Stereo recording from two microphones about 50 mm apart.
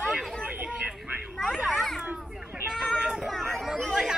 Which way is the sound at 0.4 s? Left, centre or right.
Right.